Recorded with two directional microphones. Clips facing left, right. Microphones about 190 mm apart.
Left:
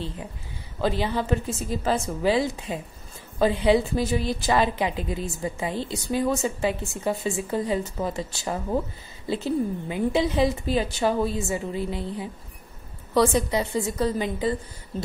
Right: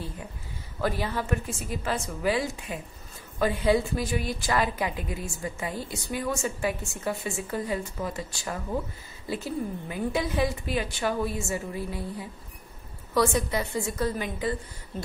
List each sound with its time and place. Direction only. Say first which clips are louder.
0.7 s a woman's voice: left 4 dB; 20° left (ahead or behind)